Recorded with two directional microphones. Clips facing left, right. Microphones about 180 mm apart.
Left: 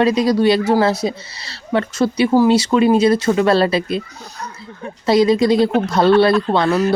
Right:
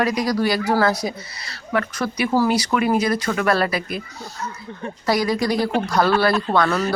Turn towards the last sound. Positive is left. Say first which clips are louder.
# left 4 dB
turn(degrees=20)  # may be behind; listen again after turning